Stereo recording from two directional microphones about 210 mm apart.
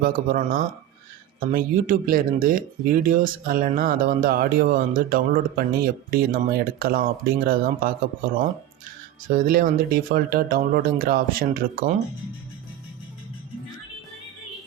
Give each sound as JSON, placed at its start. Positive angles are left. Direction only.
{"t": 0.0, "sound": "speech", "side_deg": -40}